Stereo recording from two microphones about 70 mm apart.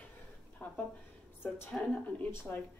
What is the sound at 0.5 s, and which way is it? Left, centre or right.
Speech, left.